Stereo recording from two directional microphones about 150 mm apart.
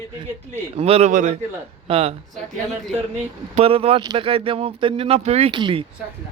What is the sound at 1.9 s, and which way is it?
Speech, 40° right (ahead or behind).